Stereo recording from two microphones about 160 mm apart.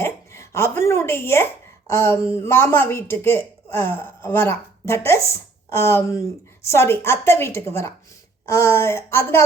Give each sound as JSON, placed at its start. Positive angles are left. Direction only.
{"t": 0.0, "sound": "speech", "side_deg": 15}